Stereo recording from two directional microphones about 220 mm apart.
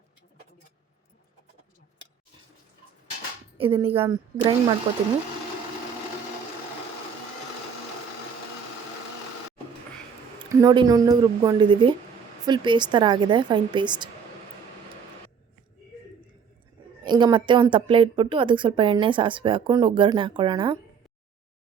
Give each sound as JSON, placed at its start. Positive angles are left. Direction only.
{"t": 3.6, "sound": "a woman's voice", "side_deg": -25}
{"t": 10.5, "sound": "a woman's voice", "side_deg": -15}
{"t": 17.1, "sound": "a woman's voice", "side_deg": -20}